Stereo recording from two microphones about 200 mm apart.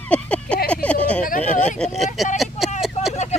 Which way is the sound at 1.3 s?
40° left (ahead or behind).